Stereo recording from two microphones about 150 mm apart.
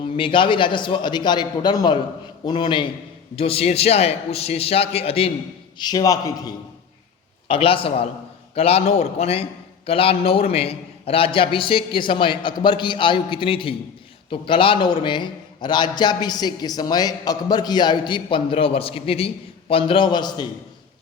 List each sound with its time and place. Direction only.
0.2 s a man's voice: 35° left (ahead or behind)
5.8 s a man's voice: 25° left (ahead or behind)
7.4 s a man's voice: 35° left (ahead or behind)